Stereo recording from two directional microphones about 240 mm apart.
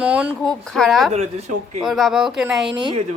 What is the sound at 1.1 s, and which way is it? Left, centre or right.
Speech, right.